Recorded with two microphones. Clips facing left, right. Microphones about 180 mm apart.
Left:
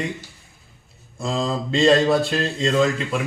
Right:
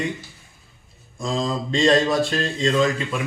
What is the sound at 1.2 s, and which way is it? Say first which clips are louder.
Speech: even; 5° left (ahead or behind).